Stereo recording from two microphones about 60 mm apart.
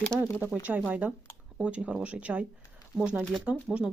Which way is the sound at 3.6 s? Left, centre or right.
Centre.